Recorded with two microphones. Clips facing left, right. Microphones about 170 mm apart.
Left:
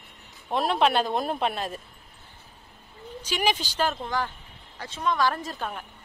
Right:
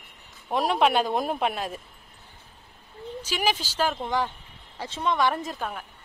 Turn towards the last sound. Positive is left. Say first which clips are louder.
# right 1 dB
turn(degrees=-20)  # may be behind; listen again after turning